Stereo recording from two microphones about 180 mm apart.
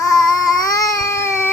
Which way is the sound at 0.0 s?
20° left (ahead or behind).